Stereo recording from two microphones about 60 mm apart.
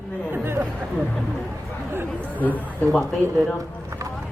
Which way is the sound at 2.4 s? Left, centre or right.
Left.